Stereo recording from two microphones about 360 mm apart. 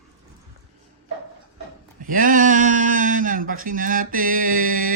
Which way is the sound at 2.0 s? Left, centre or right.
Right.